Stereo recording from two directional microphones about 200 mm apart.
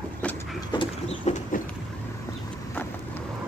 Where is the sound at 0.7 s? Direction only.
35° left (ahead or behind).